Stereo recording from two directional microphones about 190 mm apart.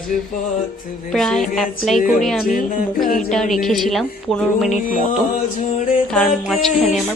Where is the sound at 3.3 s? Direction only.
Centre (ahead or behind).